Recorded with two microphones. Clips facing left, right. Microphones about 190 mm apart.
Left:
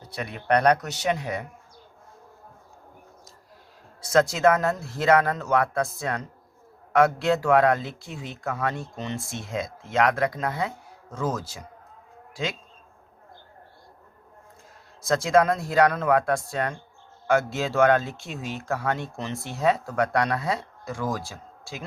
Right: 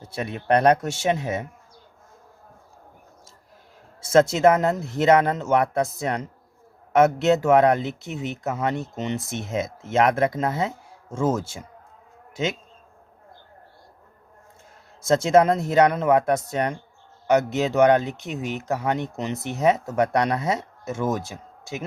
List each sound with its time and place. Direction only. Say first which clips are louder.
0.0 s speech: right 4 dB; 25° right (ahead or behind)
4.0 s speech: right 3 dB; 25° right (ahead or behind)
15.0 s speech: right 3 dB; 25° right (ahead or behind)